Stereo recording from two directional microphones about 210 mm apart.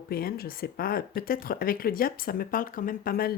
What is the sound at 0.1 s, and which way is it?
Speech, 45° left (ahead or behind).